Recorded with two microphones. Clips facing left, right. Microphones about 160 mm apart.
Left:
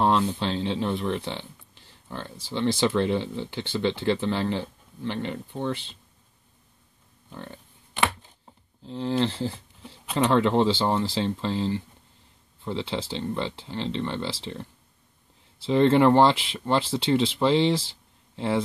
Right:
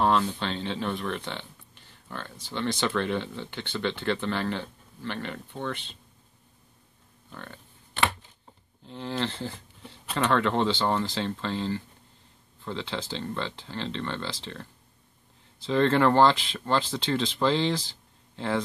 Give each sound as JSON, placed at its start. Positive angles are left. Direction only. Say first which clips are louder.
{"t": 0.0, "sound": "speech", "louder": "left 2 dB", "side_deg": 20}
{"t": 7.2, "sound": "pig", "louder": "left 3 dB", "side_deg": 20}
{"t": 8.8, "sound": "speech", "louder": "left 6 dB", "side_deg": 25}
{"t": 10.1, "sound": "speech", "louder": "left 4 dB", "side_deg": 20}